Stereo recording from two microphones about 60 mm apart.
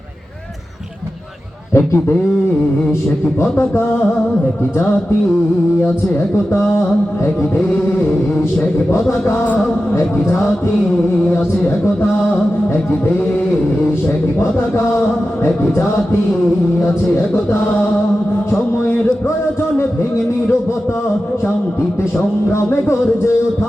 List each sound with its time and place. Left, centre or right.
1.7 s speech: left
8.9 s speech: left
22.5 s speech: left